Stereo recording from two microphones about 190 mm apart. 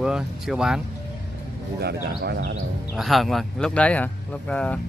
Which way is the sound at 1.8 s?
60° right (ahead or behind).